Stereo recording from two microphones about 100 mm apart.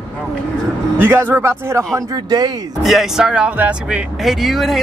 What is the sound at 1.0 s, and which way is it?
A man's voice, 20° right (ahead or behind).